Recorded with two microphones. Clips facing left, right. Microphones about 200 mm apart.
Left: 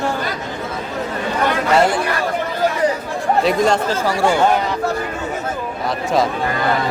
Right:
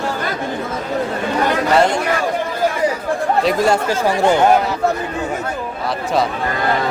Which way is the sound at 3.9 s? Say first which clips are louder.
Right 2 dB; 20° right (ahead or behind).